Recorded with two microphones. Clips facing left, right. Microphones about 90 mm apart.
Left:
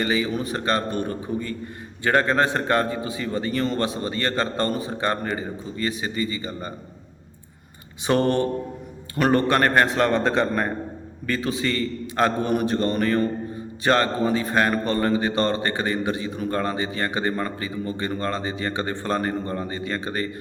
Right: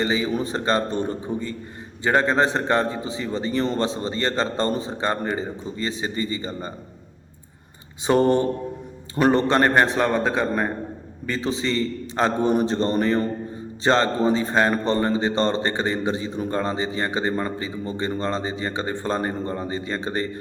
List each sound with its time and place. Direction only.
0.0 s a man's voice: 25° right (ahead or behind)
8.0 s a man's voice: 15° right (ahead or behind)
10.1 s a man's voice: 10° right (ahead or behind)
11.3 s a man's voice: 25° right (ahead or behind)